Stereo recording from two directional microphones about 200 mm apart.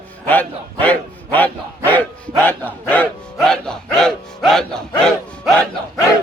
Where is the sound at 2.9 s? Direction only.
5° left (ahead or behind).